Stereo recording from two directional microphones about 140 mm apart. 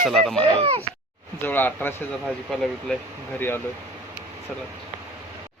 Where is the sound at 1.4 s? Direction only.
15° left (ahead or behind).